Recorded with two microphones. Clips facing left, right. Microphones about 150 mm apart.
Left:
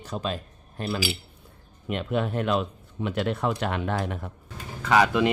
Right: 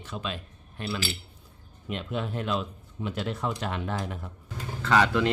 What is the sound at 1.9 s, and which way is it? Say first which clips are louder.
Speech: left 5 dB; 60° left (ahead or behind).